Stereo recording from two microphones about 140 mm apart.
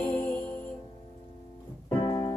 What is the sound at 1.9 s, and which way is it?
Music, 35° left (ahead or behind).